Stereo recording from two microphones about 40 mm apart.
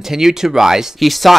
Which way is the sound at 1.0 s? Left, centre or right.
Centre.